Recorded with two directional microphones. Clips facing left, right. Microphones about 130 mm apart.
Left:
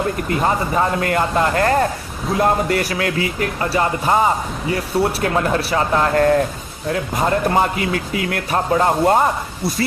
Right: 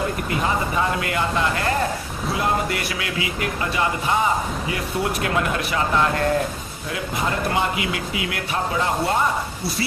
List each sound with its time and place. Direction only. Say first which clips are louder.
0.3 s speech: left 5 dB; 40° left (ahead or behind)